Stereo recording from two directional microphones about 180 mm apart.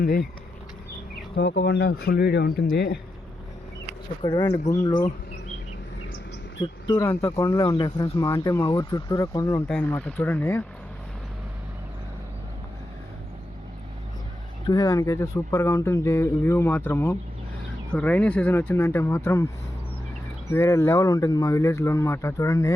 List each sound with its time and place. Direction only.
0.0 s speech: 55° left (ahead or behind)
1.4 s speech: 80° left; by 3.0 s 60° left (ahead or behind)
4.2 s speech: 25° left (ahead or behind)
4.6 s speech: 40° left (ahead or behind)
6.6 s speech: 20° left (ahead or behind)
9.6 s speech: 10° left (ahead or behind)
14.7 s speech: 20° left (ahead or behind)
20.5 s speech: 15° left (ahead or behind)